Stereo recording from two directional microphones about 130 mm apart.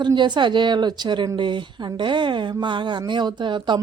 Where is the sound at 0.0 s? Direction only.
35° right (ahead or behind).